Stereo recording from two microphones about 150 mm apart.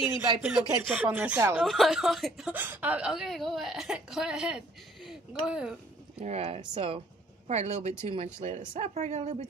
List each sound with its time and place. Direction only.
0.4 s speech: 15° right (ahead or behind)
1.7 s speech: centre (ahead or behind)
6.1 s speech: 45° right (ahead or behind)